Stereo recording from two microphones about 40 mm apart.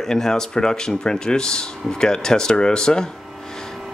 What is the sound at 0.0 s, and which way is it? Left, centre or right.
Speech, centre.